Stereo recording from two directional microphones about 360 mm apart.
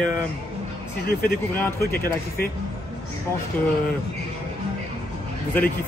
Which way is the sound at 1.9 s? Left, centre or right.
Left.